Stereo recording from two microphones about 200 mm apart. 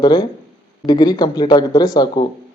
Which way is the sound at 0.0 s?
20° left (ahead or behind).